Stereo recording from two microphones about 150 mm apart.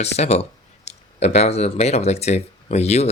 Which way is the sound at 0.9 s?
45° left (ahead or behind).